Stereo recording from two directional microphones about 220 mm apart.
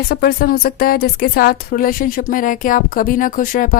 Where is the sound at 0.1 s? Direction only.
45° left (ahead or behind).